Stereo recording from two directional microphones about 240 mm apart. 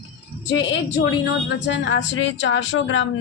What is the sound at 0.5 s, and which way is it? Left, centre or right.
A woman's voice, left.